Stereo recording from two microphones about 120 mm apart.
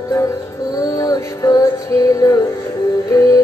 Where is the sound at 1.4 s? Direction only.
30° left (ahead or behind).